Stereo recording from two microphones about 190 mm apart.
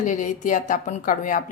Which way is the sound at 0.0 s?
40° left (ahead or behind).